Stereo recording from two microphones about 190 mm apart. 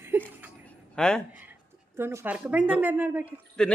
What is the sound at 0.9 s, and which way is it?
Speech, 5° left (ahead or behind).